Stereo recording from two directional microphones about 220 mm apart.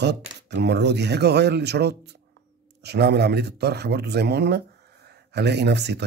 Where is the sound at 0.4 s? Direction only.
50° right (ahead or behind).